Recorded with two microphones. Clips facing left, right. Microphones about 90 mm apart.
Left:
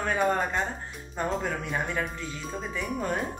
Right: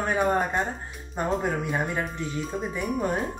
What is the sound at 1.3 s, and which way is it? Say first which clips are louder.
A woman's voice: right 6 dB; 10° right (ahead or behind).